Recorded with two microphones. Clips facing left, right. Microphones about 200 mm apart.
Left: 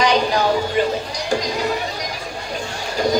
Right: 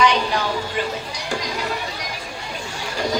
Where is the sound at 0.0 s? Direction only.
40° left (ahead or behind).